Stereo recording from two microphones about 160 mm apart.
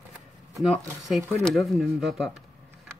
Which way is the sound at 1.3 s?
5° left (ahead or behind).